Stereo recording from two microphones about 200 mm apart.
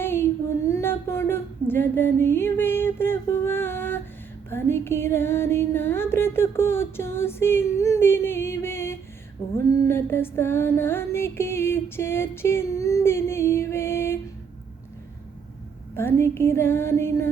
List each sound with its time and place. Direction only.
0.0 s a sound: 10° left (ahead or behind)
4.4 s music: 10° left (ahead or behind)
9.4 s female singing: 30° left (ahead or behind)
9.8 s music: 10° left (ahead or behind)
16.0 s music: 10° left (ahead or behind)